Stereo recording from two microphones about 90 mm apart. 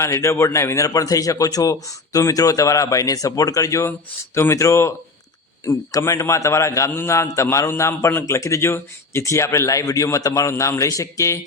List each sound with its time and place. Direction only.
0.0 s a man's voice: 35° left (ahead or behind)